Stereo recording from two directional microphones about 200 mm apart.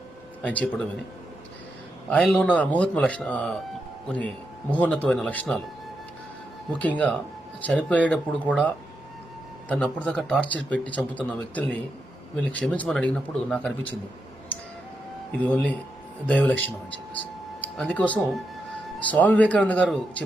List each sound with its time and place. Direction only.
0.4 s a man's voice: 5° left (ahead or behind)
2.0 s speech: 5° left (ahead or behind)
4.7 s a man's voice: 10° left (ahead or behind)
6.7 s a man's voice: 5° left (ahead or behind)
15.4 s a man's voice: 5° left (ahead or behind)